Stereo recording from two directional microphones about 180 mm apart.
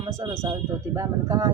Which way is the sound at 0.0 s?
20° right (ahead or behind).